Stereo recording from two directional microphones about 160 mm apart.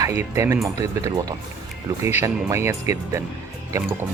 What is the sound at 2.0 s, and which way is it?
Speech, 15° right (ahead or behind).